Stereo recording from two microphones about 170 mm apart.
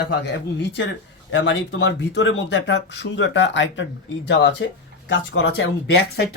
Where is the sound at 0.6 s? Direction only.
90° left.